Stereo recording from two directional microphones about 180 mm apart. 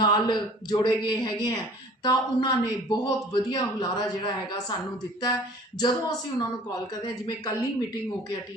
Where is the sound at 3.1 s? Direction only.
20° left (ahead or behind).